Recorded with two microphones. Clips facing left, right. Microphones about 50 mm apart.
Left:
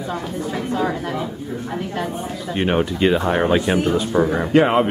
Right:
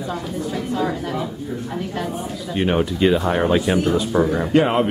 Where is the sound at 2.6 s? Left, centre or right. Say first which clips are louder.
Even; centre.